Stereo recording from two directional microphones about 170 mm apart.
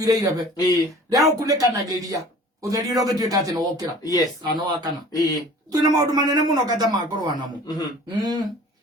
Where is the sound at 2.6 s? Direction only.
20° right (ahead or behind).